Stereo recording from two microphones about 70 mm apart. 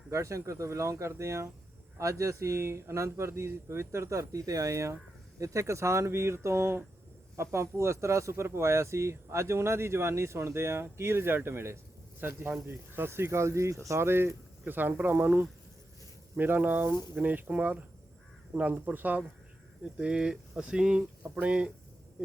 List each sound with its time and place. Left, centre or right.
0.1 s speech: right; by 21.7 s centre